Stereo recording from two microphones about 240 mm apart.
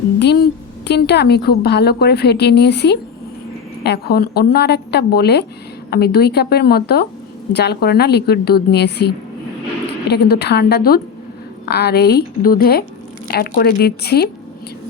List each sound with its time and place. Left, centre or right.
0.9 s a woman's voice: left